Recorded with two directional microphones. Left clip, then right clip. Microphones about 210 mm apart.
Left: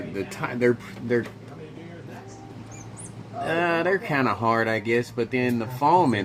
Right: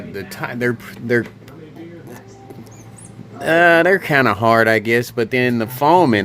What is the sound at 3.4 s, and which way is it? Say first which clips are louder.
Speech: right 11 dB; 50° right (ahead or behind).